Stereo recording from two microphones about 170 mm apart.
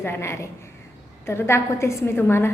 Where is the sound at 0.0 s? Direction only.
15° left (ahead or behind).